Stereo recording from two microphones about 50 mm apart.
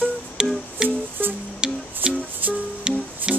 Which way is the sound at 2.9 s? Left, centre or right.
Centre.